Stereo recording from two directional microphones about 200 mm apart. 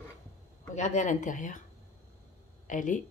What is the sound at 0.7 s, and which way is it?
Speech, 35° left (ahead or behind).